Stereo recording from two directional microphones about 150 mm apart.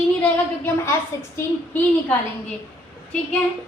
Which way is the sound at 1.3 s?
10° left (ahead or behind).